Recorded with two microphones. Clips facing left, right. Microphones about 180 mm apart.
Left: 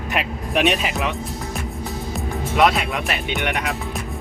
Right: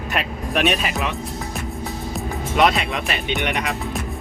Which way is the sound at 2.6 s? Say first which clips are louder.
Even; 5° left (ahead or behind).